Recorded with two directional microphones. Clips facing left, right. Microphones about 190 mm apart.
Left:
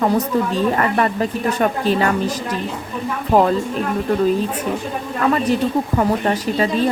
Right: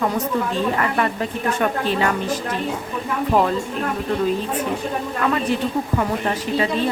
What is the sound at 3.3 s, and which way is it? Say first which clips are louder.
Speech: left 4 dB; 40° left (ahead or behind).